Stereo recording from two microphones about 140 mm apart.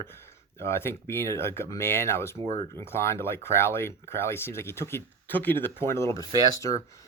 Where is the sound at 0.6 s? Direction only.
15° left (ahead or behind).